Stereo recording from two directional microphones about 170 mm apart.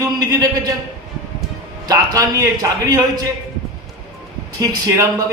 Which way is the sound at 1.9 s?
20° right (ahead or behind).